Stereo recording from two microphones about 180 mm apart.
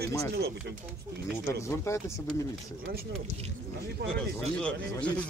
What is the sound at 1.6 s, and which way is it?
Speech, 15° left (ahead or behind).